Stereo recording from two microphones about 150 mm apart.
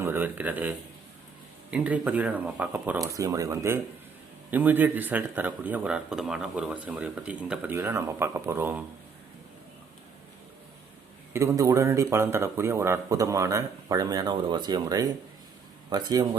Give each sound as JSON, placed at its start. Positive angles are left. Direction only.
{"t": 0.0, "sound": "speech", "side_deg": -15}
{"t": 3.0, "sound": "speech", "side_deg": -20}
{"t": 11.3, "sound": "speech", "side_deg": -20}